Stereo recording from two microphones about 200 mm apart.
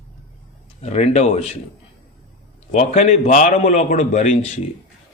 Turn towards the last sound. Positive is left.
turn(degrees=35)  # may be behind; listen again after turning